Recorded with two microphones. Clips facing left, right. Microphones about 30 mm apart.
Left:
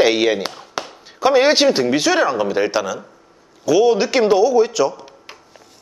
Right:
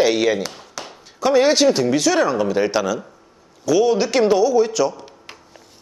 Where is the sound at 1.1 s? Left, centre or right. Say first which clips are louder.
Left 2 dB; left.